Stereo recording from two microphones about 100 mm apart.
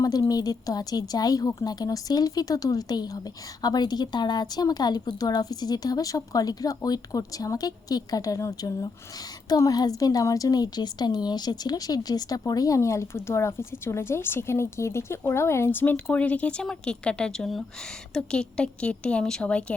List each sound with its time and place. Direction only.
0.0 s a woman's voice: 40° left (ahead or behind); by 19.7 s 10° left (ahead or behind)